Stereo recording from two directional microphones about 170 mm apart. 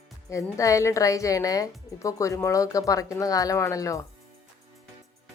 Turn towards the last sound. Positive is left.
turn(degrees=20)  # may be behind; listen again after turning